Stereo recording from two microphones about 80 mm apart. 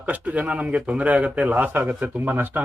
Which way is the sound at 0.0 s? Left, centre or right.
Centre.